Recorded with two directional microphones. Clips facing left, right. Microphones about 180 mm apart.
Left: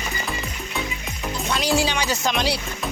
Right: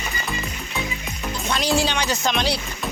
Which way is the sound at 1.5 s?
10° left (ahead or behind).